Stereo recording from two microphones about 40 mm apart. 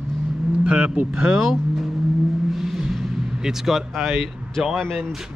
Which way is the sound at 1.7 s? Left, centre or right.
Centre.